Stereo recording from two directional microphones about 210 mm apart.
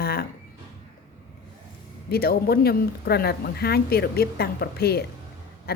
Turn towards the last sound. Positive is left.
turn(degrees=45)  # may be behind; listen again after turning